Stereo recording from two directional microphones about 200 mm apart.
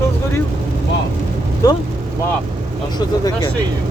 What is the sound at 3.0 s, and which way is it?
Speech, 20° left (ahead or behind).